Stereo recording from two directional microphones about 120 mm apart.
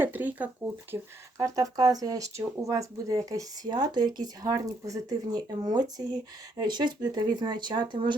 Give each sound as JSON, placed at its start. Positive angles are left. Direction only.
{"t": 0.0, "sound": "speech", "side_deg": -15}
{"t": 1.4, "sound": "speech", "side_deg": -30}